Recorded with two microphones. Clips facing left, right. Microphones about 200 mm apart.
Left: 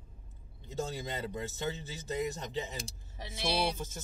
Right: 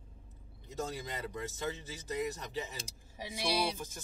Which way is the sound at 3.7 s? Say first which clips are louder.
Left 3 dB; 25° left (ahead or behind).